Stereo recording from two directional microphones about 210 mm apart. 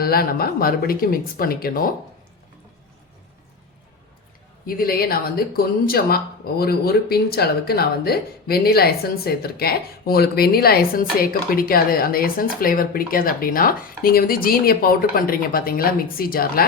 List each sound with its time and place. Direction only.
0.0 s speech: 45° left (ahead or behind)
4.6 s speech: 45° left (ahead or behind)